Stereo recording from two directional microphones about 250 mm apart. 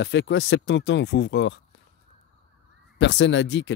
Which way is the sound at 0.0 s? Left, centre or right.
Left.